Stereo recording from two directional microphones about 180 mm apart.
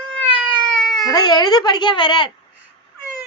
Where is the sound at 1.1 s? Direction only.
25° left (ahead or behind).